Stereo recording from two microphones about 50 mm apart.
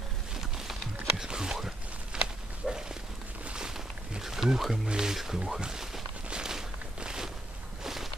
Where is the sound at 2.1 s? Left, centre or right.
Centre.